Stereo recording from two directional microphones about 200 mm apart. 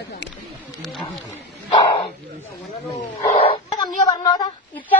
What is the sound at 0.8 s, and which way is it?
Speech, centre (ahead or behind).